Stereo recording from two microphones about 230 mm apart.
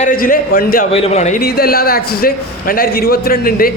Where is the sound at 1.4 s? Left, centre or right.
Left.